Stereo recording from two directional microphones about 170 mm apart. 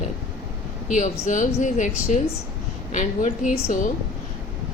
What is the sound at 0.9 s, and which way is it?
A woman's voice, 45° left (ahead or behind).